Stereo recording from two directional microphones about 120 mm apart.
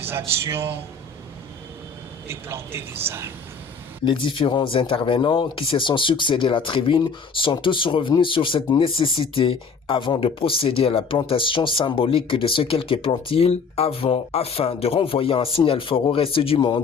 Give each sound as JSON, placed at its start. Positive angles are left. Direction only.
{"t": 0.1, "sound": "speech", "side_deg": -20}
{"t": 2.2, "sound": "speech", "side_deg": -20}
{"t": 4.0, "sound": "speech", "side_deg": 45}
{"t": 16.6, "sound": "speech", "side_deg": 35}